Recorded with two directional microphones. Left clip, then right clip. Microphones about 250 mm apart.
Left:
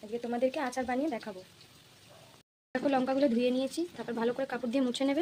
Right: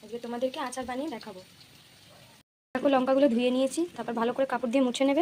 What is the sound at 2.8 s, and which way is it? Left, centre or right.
A woman's voice, centre.